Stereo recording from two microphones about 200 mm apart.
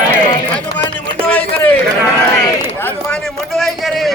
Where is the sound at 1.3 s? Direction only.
5° left (ahead or behind).